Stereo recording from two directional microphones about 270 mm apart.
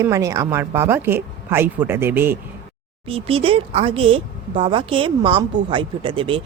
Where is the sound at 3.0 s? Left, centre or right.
Right.